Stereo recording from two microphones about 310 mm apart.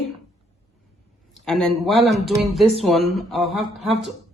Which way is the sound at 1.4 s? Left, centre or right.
Centre.